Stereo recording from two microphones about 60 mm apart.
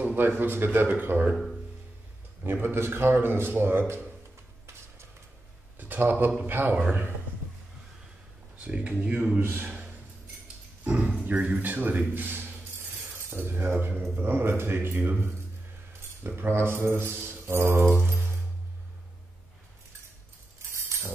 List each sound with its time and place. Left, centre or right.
0.0 s a sound: right
0.4 s speech: right
1.3 s speech: centre
2.4 s speech: right
5.8 s speech: right
8.5 s speech: centre
9.4 s speech: right
10.8 s speech: right